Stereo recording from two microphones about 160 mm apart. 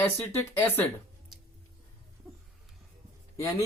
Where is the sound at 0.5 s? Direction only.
15° left (ahead or behind).